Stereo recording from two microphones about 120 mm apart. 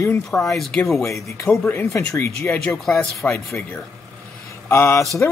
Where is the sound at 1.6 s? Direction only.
15° left (ahead or behind).